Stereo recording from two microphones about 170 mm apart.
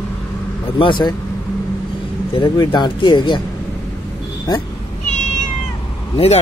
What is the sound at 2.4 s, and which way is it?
Speech, 25° left (ahead or behind).